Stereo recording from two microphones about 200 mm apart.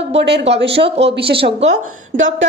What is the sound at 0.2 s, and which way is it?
Speech, 60° right (ahead or behind).